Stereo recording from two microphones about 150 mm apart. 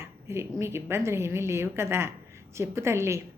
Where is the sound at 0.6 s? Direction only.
15° right (ahead or behind).